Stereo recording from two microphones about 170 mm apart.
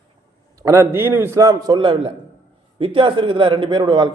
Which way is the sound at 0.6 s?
15° right (ahead or behind).